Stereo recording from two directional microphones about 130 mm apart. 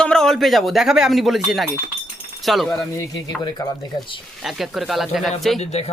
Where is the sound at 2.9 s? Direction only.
25° left (ahead or behind).